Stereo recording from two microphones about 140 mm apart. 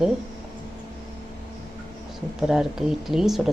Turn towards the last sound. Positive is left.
turn(degrees=0)  # may be behind; listen again after turning